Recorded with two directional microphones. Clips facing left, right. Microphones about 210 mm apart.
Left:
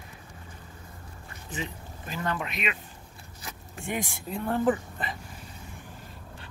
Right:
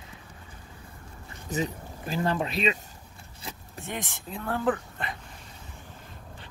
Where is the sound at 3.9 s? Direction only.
Centre (ahead or behind).